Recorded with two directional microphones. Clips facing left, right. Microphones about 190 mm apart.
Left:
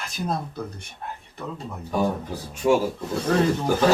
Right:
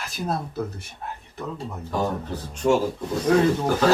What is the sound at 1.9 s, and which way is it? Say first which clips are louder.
Speech: left 2 dB; 10° left (ahead or behind).